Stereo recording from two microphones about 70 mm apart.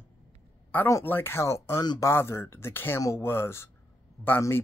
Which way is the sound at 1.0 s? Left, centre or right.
Left.